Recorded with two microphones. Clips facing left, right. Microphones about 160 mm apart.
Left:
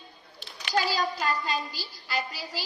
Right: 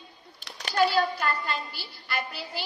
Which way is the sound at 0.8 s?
60° right (ahead or behind).